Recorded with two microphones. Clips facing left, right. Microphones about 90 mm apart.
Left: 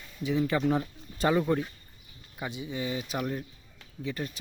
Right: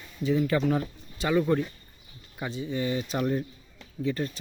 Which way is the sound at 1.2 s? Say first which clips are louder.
Left 2 dB; 45° left (ahead or behind).